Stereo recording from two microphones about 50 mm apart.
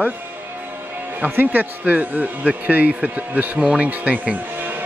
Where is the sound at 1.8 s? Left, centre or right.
Right.